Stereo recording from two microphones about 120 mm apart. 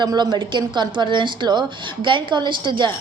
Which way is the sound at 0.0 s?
40° right (ahead or behind).